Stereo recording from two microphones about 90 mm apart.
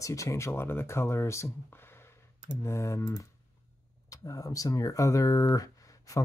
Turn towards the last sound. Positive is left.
turn(degrees=40)  # may be behind; listen again after turning